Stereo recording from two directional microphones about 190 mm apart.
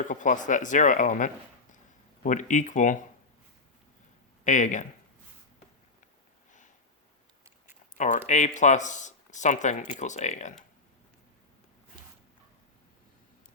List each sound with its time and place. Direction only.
0.0 s speech: 40° left (ahead or behind)
4.4 s speech: 40° left (ahead or behind)
7.9 s speech: 40° left (ahead or behind)